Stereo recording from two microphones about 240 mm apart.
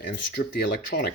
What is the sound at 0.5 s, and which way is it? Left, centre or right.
Speech, left.